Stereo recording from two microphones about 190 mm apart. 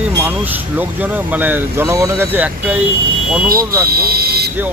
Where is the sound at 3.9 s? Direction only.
55° right (ahead or behind).